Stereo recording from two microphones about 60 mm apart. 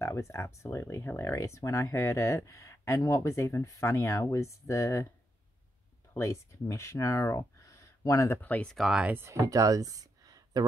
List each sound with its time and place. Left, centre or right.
0.0 s speech: left
3.0 s speech: left
6.1 s speech: left
8.4 s speech: left
8.7 s speech: centre
9.1 s speech: right
9.5 s speech: right